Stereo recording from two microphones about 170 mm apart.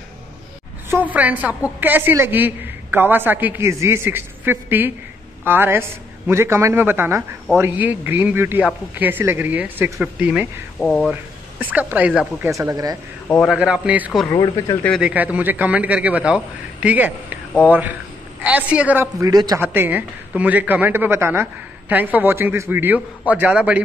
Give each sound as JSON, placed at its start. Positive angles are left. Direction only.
{"t": 0.8, "sound": "a woman's voice", "side_deg": -10}
{"t": 11.6, "sound": "a woman's voice", "side_deg": -10}
{"t": 12.4, "sound": "speech", "side_deg": -20}
{"t": 13.5, "sound": "a woman's voice", "side_deg": -5}
{"t": 14.3, "sound": "speech", "side_deg": 25}
{"t": 15.0, "sound": "a woman's voice", "side_deg": -10}